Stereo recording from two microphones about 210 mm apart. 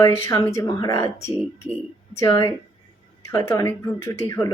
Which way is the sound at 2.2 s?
15° left (ahead or behind).